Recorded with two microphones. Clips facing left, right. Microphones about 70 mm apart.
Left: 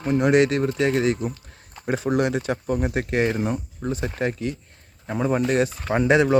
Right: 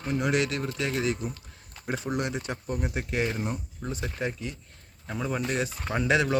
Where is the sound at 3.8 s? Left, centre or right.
Left.